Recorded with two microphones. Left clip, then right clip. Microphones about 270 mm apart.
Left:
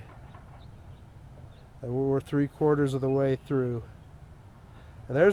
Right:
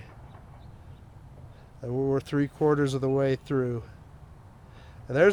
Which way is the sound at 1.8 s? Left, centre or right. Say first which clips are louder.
Even; right.